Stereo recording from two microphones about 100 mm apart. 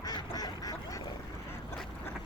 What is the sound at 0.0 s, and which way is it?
Quack, 40° left (ahead or behind).